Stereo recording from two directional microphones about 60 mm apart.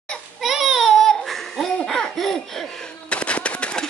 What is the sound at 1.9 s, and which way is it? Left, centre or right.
Laughter, centre.